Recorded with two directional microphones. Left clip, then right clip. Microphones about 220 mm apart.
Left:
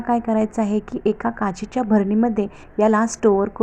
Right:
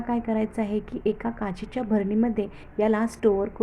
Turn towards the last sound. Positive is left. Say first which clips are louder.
# left 5 dB
turn(degrees=20)  # may be behind; listen again after turning